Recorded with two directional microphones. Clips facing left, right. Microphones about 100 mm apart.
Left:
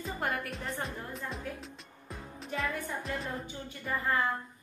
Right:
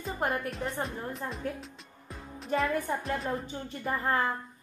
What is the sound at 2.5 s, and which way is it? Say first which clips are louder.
Speech: right 7 dB; 45° right (ahead or behind).